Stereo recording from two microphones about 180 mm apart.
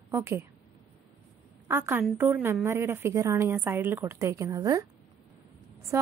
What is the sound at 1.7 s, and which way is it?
A woman's voice, 10° right (ahead or behind).